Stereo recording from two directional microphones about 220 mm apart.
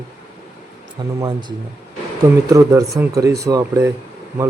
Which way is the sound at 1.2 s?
20° right (ahead or behind).